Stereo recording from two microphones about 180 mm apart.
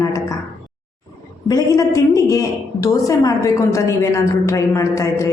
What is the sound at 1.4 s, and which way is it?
A woman's voice, 20° left (ahead or behind).